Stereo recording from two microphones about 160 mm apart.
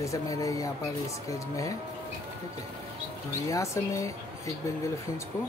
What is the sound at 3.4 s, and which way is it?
Speech, 20° left (ahead or behind).